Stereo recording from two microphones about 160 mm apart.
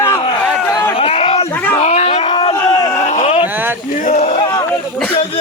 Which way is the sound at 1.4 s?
10° left (ahead or behind).